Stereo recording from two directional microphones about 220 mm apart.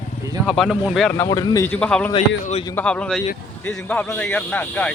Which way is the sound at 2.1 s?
25° left (ahead or behind).